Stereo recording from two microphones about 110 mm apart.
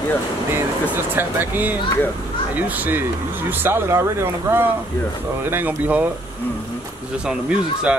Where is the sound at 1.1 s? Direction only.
20° right (ahead or behind).